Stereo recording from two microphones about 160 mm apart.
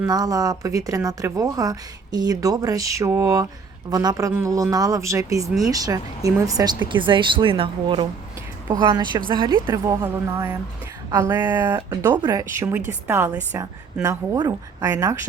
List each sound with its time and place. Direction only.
0.1 s a woman's voice: 25° right (ahead or behind)